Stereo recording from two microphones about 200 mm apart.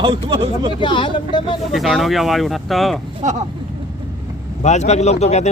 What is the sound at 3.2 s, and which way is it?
Speech, 35° right (ahead or behind).